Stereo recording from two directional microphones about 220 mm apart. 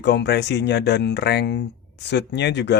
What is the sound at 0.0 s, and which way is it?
Speech, 50° left (ahead or behind).